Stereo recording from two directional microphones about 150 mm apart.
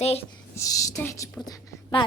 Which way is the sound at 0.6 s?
20° left (ahead or behind).